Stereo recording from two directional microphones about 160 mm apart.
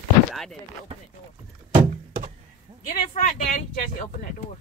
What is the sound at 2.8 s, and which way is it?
Speech, 55° left (ahead or behind).